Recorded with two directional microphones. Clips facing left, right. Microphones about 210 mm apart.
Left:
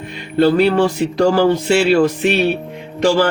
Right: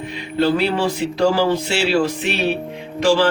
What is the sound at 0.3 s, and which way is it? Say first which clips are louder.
Speech: left 5 dB; 50° left (ahead or behind).